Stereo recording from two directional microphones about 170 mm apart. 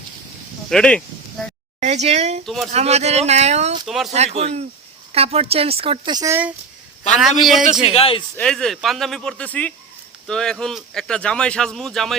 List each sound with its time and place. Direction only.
0.7 s speech: 5° left (ahead or behind)
1.8 s a woman's voice: 40° right (ahead or behind)
3.8 s speech: centre (ahead or behind)
4.1 s a woman's voice: 40° right (ahead or behind)
7.2 s speech: centre (ahead or behind)
7.9 s speech: 35° left (ahead or behind)
8.4 s speech: centre (ahead or behind)